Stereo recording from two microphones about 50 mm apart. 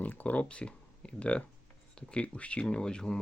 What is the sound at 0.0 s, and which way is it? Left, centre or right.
Speech, left.